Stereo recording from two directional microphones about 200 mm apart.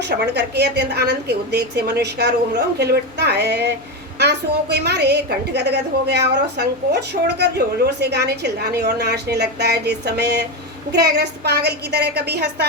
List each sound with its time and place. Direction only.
0.0 s a woman's voice: 55° right (ahead or behind)